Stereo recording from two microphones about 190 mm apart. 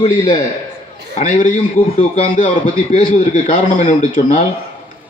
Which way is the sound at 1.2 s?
40° left (ahead or behind).